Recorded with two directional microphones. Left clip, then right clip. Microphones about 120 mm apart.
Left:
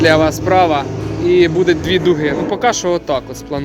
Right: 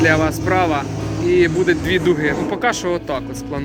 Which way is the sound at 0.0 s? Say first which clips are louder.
Left 4 dB; 35° left (ahead or behind).